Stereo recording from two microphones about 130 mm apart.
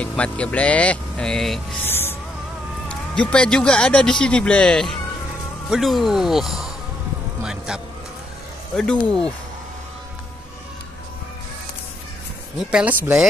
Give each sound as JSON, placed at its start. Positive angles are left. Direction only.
{"t": 0.0, "sound": "a man's voice", "side_deg": 10}
{"t": 1.9, "sound": "music", "side_deg": 15}
{"t": 2.9, "sound": "a man's voice", "side_deg": 10}
{"t": 7.4, "sound": "vehicle", "side_deg": -5}
{"t": 8.7, "sound": "speech", "side_deg": 5}
{"t": 12.5, "sound": "speech", "side_deg": -10}